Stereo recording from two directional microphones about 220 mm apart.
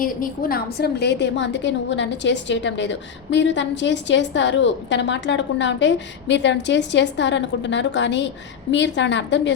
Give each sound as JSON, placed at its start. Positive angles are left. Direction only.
{"t": 0.0, "sound": "a woman's voice", "side_deg": 40}